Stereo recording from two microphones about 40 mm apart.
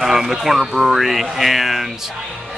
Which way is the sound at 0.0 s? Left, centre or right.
Centre.